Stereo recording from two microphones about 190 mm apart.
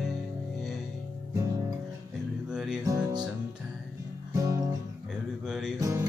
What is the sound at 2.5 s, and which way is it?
Music, 5° right (ahead or behind).